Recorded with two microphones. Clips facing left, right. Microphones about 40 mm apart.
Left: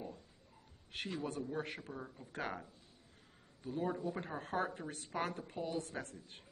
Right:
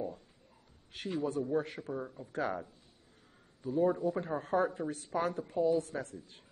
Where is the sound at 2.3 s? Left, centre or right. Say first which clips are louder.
Right 7 dB; left.